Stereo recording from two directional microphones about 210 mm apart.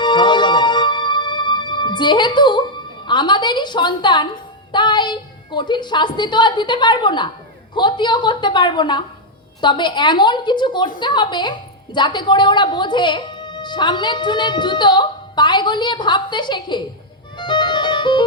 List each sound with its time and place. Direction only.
0.0 s music: 20° left (ahead or behind)
3.1 s a woman's voice: 20° left (ahead or behind)
17.3 s music: 20° left (ahead or behind)